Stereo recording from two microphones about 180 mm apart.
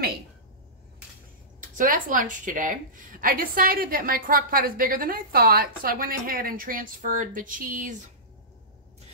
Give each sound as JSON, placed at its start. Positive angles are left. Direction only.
{"t": 1.6, "sound": "a woman's voice", "side_deg": -45}